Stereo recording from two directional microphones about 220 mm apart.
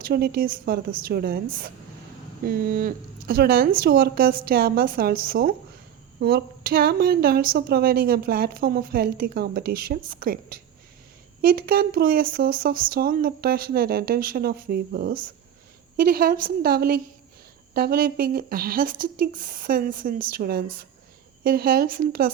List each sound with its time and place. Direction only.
0.0 s speech: 45° right (ahead or behind)